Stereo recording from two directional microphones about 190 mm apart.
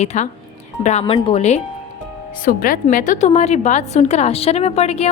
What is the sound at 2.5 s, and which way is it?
A woman's voice, 45° left (ahead or behind).